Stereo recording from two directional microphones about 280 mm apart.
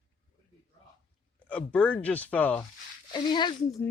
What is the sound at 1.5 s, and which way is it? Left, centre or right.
Speech, centre.